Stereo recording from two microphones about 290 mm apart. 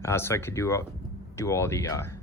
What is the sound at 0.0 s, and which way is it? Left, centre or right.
Speech, centre.